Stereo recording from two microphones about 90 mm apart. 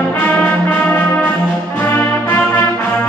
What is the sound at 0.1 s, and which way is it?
Brass instrument, 20° left (ahead or behind).